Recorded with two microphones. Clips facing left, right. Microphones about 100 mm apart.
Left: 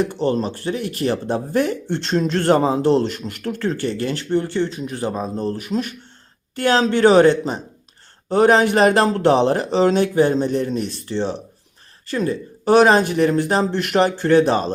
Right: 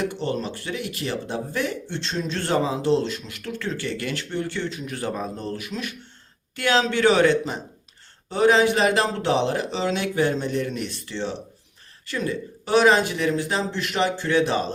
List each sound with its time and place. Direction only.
0.1 s speech: 35° left (ahead or behind)
5.5 s speech: 35° left (ahead or behind)
8.3 s speech: 50° left (ahead or behind)